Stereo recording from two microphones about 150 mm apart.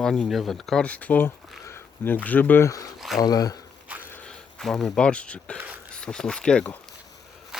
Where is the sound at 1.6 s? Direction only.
15° left (ahead or behind).